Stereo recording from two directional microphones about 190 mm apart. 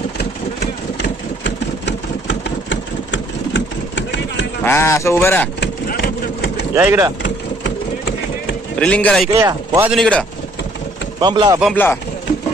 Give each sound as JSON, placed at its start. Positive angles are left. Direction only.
{"t": 0.2, "sound": "vehicle", "side_deg": 60}
{"t": 4.6, "sound": "speech", "side_deg": 15}
{"t": 5.6, "sound": "vehicle", "side_deg": 60}
{"t": 6.7, "sound": "speech", "side_deg": -15}
{"t": 7.2, "sound": "a sound", "side_deg": 65}
{"t": 8.7, "sound": "speech", "side_deg": 5}
{"t": 9.4, "sound": "a man's voice", "side_deg": -15}
{"t": 9.8, "sound": "speech", "side_deg": 5}
{"t": 11.1, "sound": "speech", "side_deg": -20}
{"t": 11.7, "sound": "speech", "side_deg": 10}